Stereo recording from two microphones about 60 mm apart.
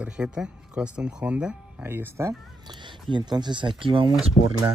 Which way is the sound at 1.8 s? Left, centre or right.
Right.